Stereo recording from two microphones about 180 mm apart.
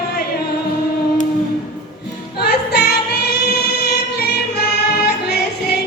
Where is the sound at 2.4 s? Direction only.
65° left (ahead or behind).